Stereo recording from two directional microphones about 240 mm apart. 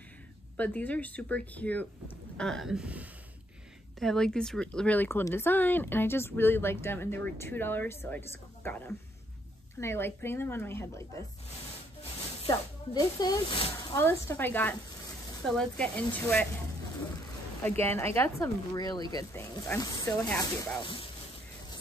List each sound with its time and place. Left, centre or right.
0.6 s a woman's voice: centre
12.4 s speech: centre
17.6 s speech: centre